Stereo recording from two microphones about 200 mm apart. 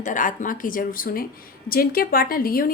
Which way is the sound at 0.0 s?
40° left (ahead or behind).